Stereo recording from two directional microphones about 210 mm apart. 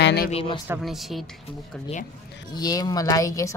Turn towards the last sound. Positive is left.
turn(degrees=15)  # may be behind; listen again after turning